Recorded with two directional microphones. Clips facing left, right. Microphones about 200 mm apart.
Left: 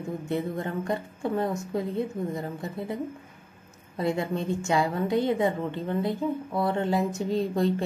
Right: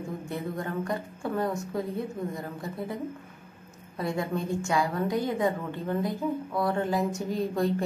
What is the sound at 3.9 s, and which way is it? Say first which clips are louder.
A woman's voice: left 2 dB; 25° left (ahead or behind).